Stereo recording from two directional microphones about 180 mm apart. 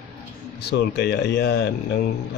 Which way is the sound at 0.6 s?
65° left (ahead or behind).